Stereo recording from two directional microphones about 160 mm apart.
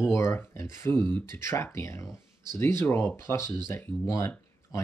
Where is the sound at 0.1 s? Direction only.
15° left (ahead or behind).